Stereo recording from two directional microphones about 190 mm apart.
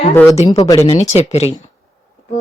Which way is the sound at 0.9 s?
35° left (ahead or behind).